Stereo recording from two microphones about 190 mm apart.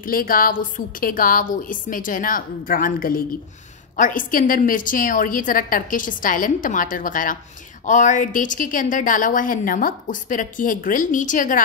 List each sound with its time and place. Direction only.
0.0 s a woman's voice: 50° left (ahead or behind)